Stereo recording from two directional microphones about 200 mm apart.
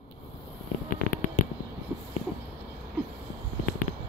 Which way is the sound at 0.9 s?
45° left (ahead or behind).